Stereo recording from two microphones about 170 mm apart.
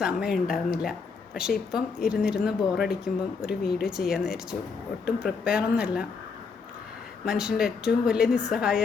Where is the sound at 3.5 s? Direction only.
70° left (ahead or behind).